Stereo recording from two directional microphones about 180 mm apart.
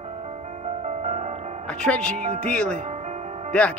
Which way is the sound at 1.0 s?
40° right (ahead or behind).